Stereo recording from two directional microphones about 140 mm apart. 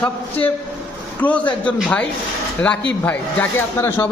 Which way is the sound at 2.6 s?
10° left (ahead or behind).